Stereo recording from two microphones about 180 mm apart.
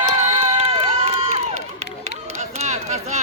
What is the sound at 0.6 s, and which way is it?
Crowd, 35° right (ahead or behind).